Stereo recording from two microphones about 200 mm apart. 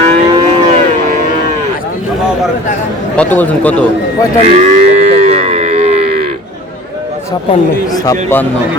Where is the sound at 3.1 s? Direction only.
5° left (ahead or behind).